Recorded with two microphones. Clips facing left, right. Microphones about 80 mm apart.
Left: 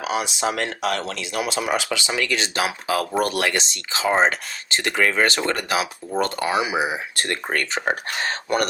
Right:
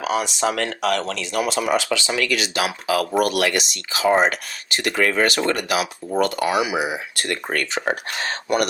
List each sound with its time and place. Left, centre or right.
0.0 s speech: centre